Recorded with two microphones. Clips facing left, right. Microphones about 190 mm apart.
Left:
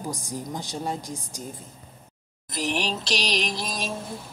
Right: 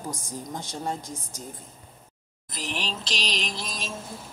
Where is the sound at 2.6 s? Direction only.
65° left (ahead or behind).